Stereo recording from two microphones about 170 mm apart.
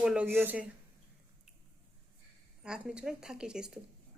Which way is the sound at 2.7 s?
5° right (ahead or behind).